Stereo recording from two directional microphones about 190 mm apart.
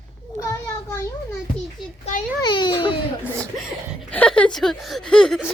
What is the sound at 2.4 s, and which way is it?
Speech, 25° left (ahead or behind).